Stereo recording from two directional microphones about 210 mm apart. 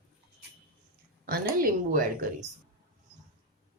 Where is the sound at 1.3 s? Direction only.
40° right (ahead or behind).